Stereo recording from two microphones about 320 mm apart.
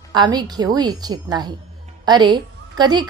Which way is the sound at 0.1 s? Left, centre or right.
Centre.